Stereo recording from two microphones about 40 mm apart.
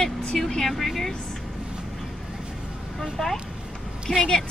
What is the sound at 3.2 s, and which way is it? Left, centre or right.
Speech, centre.